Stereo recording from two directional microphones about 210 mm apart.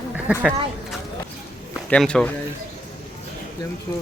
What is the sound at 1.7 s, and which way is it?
Speech, 5° left (ahead or behind).